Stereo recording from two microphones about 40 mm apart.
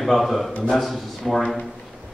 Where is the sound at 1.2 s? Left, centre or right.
Centre.